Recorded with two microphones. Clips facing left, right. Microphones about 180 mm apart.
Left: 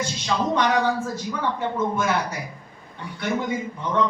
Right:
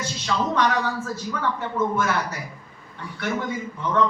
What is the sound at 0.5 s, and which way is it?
Speech, 15° left (ahead or behind).